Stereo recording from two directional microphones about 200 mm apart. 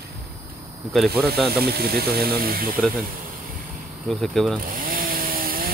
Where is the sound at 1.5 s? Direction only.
50° right (ahead or behind).